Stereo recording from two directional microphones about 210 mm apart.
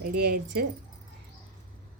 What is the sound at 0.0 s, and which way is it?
Speech, 50° right (ahead or behind).